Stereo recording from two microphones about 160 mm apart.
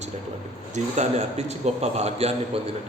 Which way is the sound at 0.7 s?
45° right (ahead or behind).